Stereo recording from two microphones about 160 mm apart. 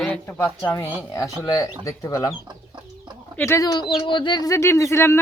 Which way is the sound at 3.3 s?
15° left (ahead or behind).